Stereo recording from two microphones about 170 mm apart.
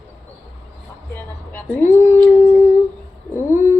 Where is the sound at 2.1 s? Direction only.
10° left (ahead or behind).